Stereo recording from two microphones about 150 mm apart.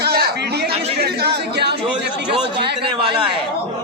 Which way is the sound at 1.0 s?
90° right.